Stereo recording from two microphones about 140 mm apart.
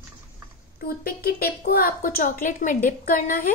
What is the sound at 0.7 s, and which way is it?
A woman's voice, 90° left.